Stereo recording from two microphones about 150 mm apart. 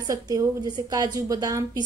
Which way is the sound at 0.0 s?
25° right (ahead or behind).